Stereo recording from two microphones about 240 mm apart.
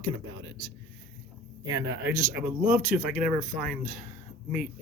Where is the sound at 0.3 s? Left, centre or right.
Right.